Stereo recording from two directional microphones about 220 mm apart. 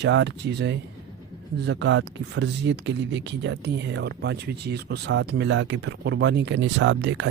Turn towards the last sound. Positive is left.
turn(degrees=-55)  # may be behind; listen again after turning